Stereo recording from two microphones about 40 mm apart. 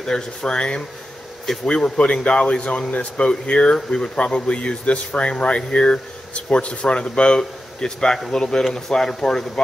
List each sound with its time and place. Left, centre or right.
0.0 s speech: centre
2.0 s speech: left